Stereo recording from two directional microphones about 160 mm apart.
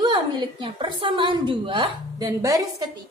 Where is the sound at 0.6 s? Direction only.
35° right (ahead or behind).